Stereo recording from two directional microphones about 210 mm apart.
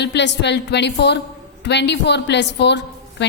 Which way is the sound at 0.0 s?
55° left (ahead or behind).